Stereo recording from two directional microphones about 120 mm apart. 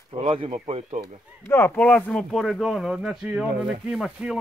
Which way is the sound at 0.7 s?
65° right (ahead or behind).